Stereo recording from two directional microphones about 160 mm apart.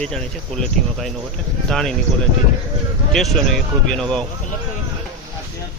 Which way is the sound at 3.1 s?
Centre (ahead or behind).